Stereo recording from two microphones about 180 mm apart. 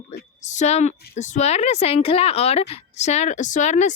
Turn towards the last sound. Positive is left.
turn(degrees=40)  # may be behind; listen again after turning